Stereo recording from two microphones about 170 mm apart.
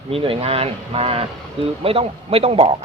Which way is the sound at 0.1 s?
35° right (ahead or behind).